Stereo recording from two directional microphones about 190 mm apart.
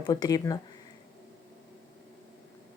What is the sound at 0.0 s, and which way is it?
Speech, 20° left (ahead or behind).